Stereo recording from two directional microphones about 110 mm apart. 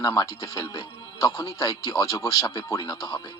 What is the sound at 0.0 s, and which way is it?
Speech, 30° left (ahead or behind).